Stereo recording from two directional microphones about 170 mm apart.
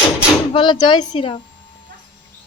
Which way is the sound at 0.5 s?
25° left (ahead or behind).